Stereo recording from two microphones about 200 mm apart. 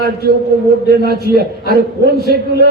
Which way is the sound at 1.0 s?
50° right (ahead or behind).